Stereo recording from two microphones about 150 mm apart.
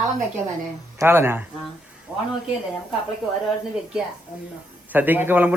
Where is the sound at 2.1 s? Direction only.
10° right (ahead or behind).